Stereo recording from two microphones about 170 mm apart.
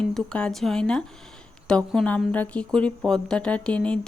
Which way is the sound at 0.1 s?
5° left (ahead or behind).